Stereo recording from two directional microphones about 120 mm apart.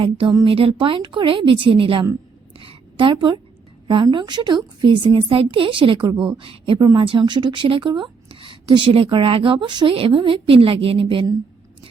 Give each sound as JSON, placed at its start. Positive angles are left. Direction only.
{"t": 0.0, "sound": "speech", "side_deg": -45}
{"t": 2.6, "sound": "a sound", "side_deg": -45}
{"t": 3.8, "sound": "a woman's voice", "side_deg": -40}